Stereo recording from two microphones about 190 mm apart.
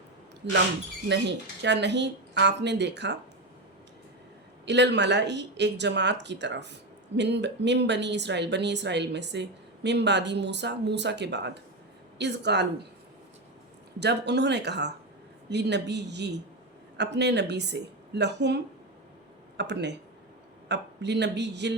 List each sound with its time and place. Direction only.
0.4 s speech: 65° right (ahead or behind)
1.6 s speech: 65° right (ahead or behind)
4.6 s speech: 65° right (ahead or behind)
14.0 s speech: 60° right (ahead or behind)